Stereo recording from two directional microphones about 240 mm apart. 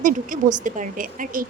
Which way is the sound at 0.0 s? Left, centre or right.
Right.